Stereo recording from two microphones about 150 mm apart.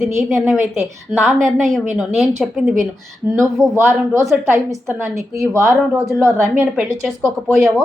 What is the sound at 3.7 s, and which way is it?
A woman's voice, 15° right (ahead or behind).